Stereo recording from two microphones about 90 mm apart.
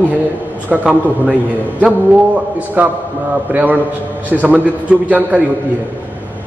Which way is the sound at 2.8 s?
20° right (ahead or behind).